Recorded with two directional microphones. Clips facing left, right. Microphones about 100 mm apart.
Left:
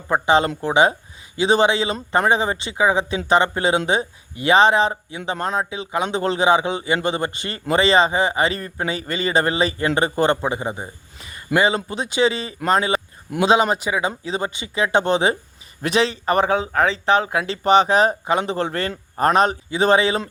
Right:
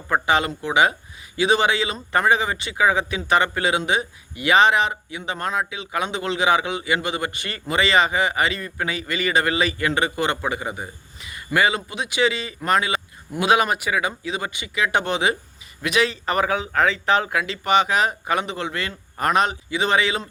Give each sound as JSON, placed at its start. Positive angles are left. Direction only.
{"t": 0.1, "sound": "a man's voice", "side_deg": 30}